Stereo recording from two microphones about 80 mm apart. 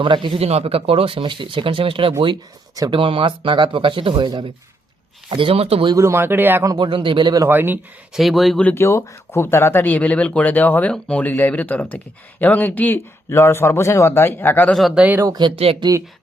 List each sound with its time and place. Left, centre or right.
0.0 s speech: right
6.0 s speech: right
6.2 s a man's voice: right
6.7 s speech: right
7.4 s a man's voice: right
8.1 s speech: centre
8.7 s speech: left
14.9 s a man's voice: centre
15.4 s speech: right